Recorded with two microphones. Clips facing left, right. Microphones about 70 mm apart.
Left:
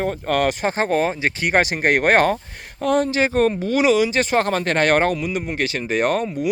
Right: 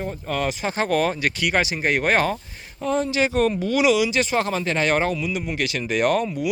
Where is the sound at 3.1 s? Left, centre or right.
Left.